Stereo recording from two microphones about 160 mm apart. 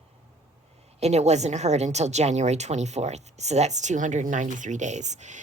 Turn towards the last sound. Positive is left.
turn(degrees=-45)  # may be behind; listen again after turning